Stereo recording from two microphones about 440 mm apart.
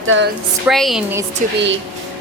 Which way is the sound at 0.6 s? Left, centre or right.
Centre.